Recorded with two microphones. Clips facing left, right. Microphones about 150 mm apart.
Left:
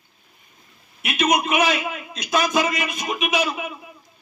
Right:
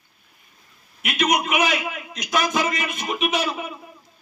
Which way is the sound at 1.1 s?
25° left (ahead or behind).